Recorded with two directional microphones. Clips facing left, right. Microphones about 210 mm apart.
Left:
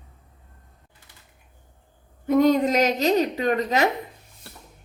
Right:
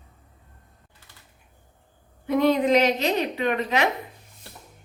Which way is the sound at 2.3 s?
45° left (ahead or behind).